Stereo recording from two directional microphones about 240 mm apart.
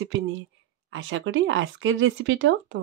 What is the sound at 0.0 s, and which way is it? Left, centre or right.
Speech, right.